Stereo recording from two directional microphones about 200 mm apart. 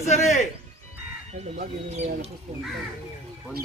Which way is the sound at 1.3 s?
35° right (ahead or behind).